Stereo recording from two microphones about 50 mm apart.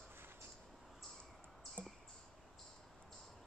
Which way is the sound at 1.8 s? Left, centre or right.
Right.